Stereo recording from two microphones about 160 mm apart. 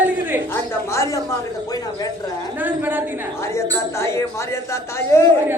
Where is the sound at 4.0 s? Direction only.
15° left (ahead or behind).